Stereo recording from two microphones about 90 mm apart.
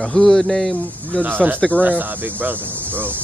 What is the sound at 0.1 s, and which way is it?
A man's voice, 5° left (ahead or behind).